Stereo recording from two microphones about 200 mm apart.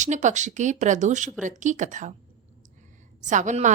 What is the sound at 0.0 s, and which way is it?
A woman's voice, 35° right (ahead or behind).